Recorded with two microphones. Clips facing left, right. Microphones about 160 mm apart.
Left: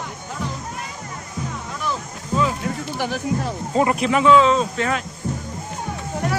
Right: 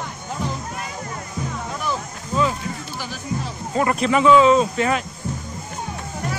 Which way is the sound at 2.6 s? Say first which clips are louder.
Left 6 dB; 60° left (ahead or behind).